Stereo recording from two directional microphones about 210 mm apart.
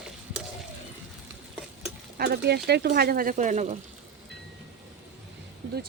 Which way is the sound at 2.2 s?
50° right (ahead or behind).